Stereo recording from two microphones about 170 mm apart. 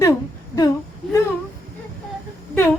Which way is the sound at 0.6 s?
20° left (ahead or behind).